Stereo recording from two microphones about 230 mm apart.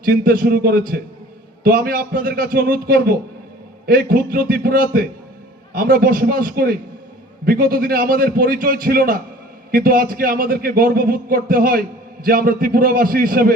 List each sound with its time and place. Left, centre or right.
0.0 s a man's voice: right